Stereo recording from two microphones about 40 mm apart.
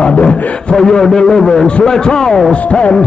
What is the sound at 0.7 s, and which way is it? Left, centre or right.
A man's voice, centre.